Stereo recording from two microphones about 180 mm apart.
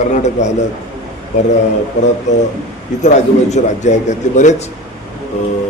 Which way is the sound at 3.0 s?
40° left (ahead or behind).